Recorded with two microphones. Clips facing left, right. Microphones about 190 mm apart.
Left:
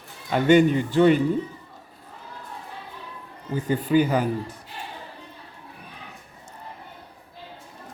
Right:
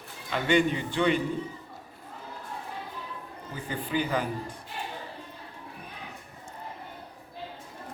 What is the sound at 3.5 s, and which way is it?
Speech, 45° left (ahead or behind).